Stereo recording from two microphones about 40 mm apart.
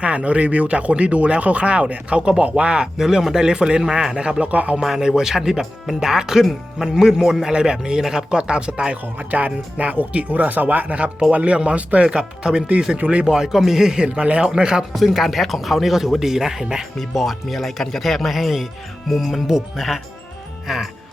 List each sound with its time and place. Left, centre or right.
0.0 s speech: right
3.0 s speech: centre
4.4 s speech: right
4.8 s speech: centre
9.1 s speech: right; by 14.8 s centre
14.9 s speech: centre
17.0 s speech: centre